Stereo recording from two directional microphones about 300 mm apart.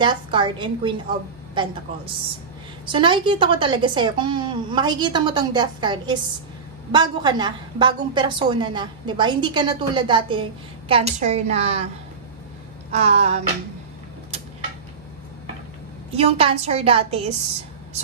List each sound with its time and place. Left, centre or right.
0.0 s a woman's voice: centre
2.9 s a woman's voice: centre
12.9 s a woman's voice: right
16.1 s a woman's voice: centre